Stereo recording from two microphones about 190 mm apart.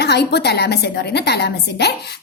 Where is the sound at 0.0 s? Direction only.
60° left (ahead or behind).